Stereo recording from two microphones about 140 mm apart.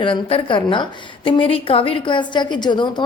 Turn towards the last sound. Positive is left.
turn(degrees=35)  # may be behind; listen again after turning